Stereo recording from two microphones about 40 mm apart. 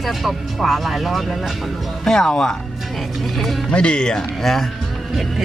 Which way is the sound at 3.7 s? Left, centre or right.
Left.